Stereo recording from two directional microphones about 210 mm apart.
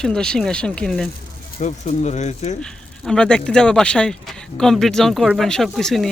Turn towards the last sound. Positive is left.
turn(degrees=0)  # may be behind; listen again after turning